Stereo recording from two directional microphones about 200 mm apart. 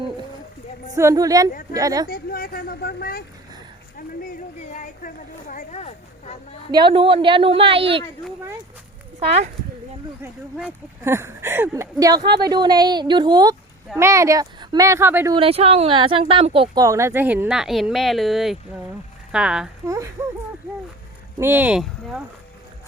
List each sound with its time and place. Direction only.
0.9 s speech: 15° right (ahead or behind)
2.0 s a woman's voice: 50° left (ahead or behind)
6.7 s speech: 20° right (ahead or behind)
9.2 s speech: 35° right (ahead or behind)
10.6 s speech: 10° right (ahead or behind)
15.4 s speech: 30° right (ahead or behind); by 19.7 s 5° right (ahead or behind)
19.8 s speech: 15° right (ahead or behind)
21.3 s speech: 10° right (ahead or behind)